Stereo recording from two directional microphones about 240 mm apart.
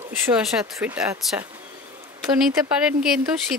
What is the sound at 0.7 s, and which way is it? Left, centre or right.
Speech, centre.